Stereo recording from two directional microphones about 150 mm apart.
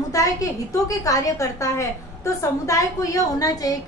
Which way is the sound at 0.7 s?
20° left (ahead or behind).